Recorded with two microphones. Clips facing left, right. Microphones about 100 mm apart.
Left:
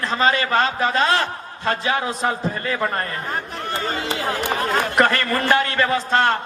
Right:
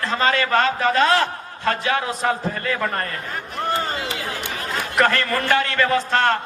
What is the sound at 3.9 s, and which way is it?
Run, 35° left (ahead or behind).